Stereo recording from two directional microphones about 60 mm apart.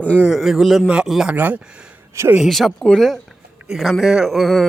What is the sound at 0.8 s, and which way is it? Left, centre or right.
Speech, centre.